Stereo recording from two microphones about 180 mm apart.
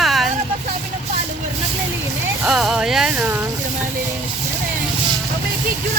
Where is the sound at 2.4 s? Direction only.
Centre (ahead or behind).